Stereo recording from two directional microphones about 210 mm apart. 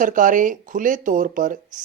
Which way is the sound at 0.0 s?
40° right (ahead or behind).